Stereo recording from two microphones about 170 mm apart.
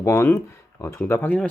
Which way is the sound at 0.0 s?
15° left (ahead or behind).